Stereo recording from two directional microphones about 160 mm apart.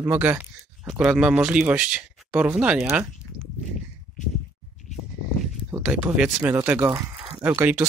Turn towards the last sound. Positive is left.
turn(degrees=-10)  # may be behind; listen again after turning